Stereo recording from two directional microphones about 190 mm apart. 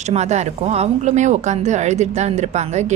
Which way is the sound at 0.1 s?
35° right (ahead or behind).